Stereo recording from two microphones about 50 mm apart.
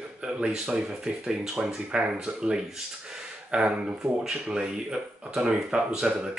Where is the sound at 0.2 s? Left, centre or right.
Centre.